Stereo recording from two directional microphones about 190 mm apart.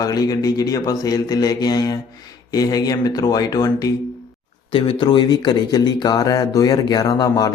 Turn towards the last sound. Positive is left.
turn(degrees=20)  # may be behind; listen again after turning